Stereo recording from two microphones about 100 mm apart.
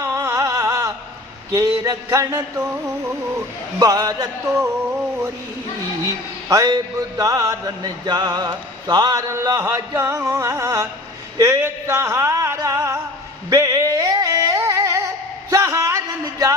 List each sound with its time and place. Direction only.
0.0 s a sound: 30° right (ahead or behind)
1.5 s music: 35° right (ahead or behind)
3.8 s music: 40° right (ahead or behind)
6.5 s music: 35° right (ahead or behind)